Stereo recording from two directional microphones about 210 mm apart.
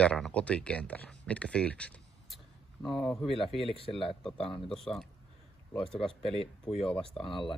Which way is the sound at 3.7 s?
25° left (ahead or behind).